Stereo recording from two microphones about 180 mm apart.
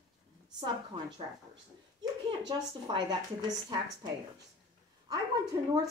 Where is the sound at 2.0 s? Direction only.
25° right (ahead or behind).